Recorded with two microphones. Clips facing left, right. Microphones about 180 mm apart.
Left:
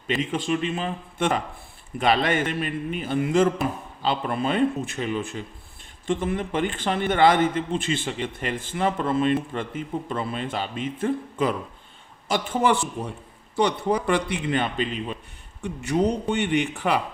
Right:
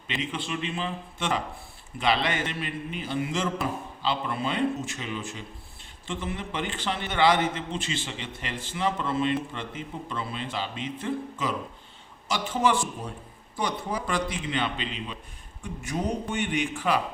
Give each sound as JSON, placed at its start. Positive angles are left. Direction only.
{"t": 0.1, "sound": "a man's voice", "side_deg": 45}
{"t": 15.6, "sound": "a man's voice", "side_deg": 70}